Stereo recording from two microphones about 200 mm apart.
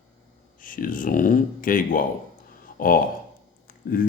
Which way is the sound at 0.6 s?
45° left (ahead or behind).